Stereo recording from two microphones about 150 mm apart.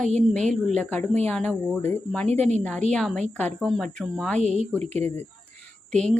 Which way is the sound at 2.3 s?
50° right (ahead or behind).